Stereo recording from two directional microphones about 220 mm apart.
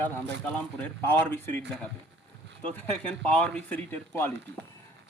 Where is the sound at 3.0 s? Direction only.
5° left (ahead or behind).